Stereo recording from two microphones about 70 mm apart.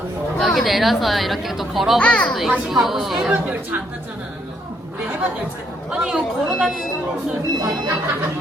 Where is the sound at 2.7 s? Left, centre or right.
Centre.